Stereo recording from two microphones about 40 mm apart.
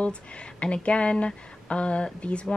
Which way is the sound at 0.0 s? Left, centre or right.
Left.